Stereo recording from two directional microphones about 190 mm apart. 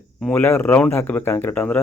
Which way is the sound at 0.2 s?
5° left (ahead or behind).